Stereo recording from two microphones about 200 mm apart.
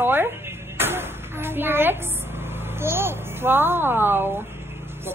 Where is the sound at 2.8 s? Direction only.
10° right (ahead or behind).